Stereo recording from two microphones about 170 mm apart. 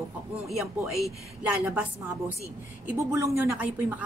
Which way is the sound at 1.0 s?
Centre (ahead or behind).